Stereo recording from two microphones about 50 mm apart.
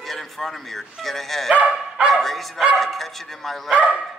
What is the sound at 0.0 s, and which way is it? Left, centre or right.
Speech, centre.